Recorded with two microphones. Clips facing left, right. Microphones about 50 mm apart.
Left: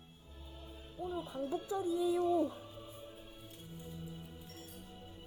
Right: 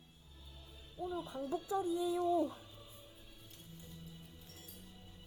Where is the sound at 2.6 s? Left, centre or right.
Left.